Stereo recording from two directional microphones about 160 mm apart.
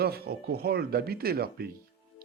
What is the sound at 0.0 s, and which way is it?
Speech, 75° right (ahead or behind).